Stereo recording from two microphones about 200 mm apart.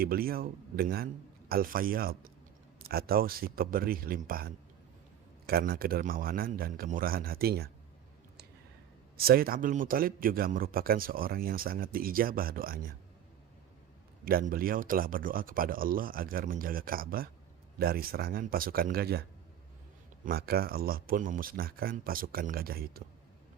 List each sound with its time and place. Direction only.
0.0 s speech: 50° right (ahead or behind)
9.1 s speech: 50° right (ahead or behind)
14.3 s speech: 45° right (ahead or behind)
20.2 s speech: 50° right (ahead or behind)